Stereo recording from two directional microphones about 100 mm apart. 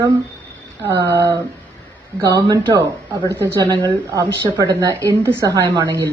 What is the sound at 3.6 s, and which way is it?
A woman's voice, 40° right (ahead or behind).